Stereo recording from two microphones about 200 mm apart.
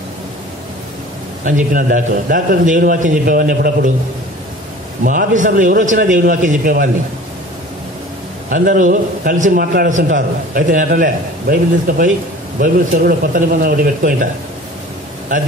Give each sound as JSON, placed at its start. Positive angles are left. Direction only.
{"t": 1.4, "sound": "a man's voice", "side_deg": -45}
{"t": 5.0, "sound": "a man's voice", "side_deg": -40}
{"t": 8.5, "sound": "a man's voice", "side_deg": -40}